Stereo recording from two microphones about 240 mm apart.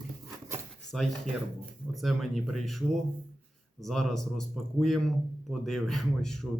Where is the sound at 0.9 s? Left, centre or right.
Centre.